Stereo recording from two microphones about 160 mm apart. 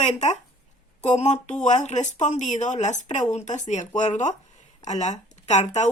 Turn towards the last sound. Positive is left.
turn(degrees=45)  # may be behind; listen again after turning